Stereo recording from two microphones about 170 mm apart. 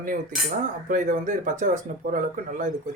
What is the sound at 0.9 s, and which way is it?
Speech, 50° right (ahead or behind).